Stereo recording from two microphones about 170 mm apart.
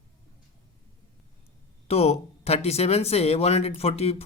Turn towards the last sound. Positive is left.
turn(degrees=35)  # may be behind; listen again after turning